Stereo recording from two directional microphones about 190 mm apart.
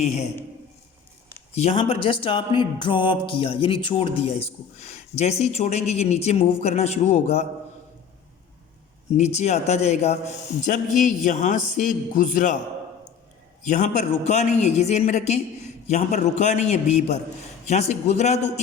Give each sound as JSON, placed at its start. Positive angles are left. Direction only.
{"t": 0.0, "sound": "speech", "side_deg": 35}
{"t": 1.5, "sound": "speech", "side_deg": 30}
{"t": 9.1, "sound": "speech", "side_deg": 35}
{"t": 13.6, "sound": "speech", "side_deg": 40}